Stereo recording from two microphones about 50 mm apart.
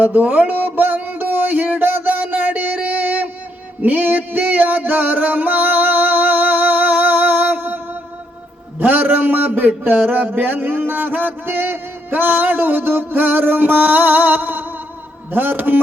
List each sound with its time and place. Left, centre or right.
0.0 s music: right
2.2 s a sound: right
3.8 s music: right
8.8 s a man's voice: right